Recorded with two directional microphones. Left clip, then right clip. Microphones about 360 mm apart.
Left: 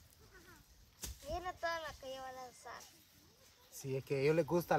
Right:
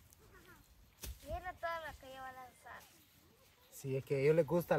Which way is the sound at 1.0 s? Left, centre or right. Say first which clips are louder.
Left 3 dB; left.